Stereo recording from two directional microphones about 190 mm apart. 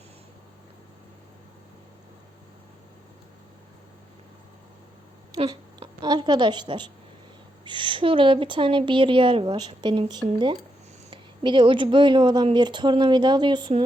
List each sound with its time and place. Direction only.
5.3 s a woman's voice: 20° right (ahead or behind)